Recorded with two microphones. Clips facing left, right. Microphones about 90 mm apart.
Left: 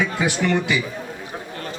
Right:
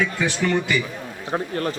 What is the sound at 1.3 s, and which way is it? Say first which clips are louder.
Speech: right 8 dB; 55° right (ahead or behind).